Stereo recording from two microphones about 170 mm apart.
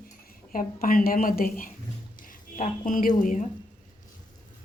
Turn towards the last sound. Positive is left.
turn(degrees=50)  # may be behind; listen again after turning